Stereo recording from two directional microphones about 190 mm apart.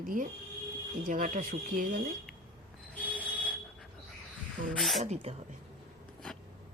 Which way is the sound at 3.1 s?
5° left (ahead or behind).